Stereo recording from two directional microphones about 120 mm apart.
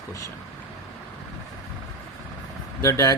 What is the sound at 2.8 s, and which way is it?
Speech, 25° left (ahead or behind).